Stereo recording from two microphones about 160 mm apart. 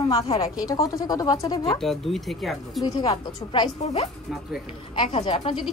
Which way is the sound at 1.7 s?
Centre (ahead or behind).